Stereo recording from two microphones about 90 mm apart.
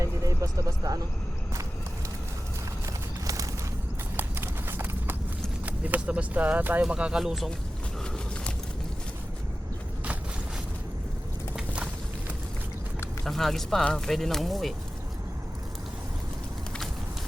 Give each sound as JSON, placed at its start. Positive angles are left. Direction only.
{"t": 0.0, "sound": "a sound", "side_deg": -40}
{"t": 2.8, "sound": "horse", "side_deg": -35}
{"t": 4.2, "sound": "clip-clop", "side_deg": -25}
{"t": 5.6, "sound": "speech", "side_deg": -15}
{"t": 11.5, "sound": "walk", "side_deg": -10}
{"t": 13.2, "sound": "speech", "side_deg": 5}